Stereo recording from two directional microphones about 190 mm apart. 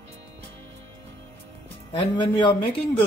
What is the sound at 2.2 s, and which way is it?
Speech, 20° left (ahead or behind).